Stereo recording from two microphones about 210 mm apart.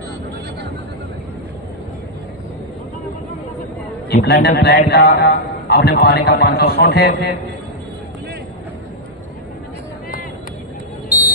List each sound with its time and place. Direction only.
4.1 s a man's voice: 55° left (ahead or behind)